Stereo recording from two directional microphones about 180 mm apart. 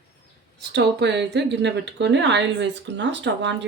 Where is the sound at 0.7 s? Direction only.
70° right (ahead or behind).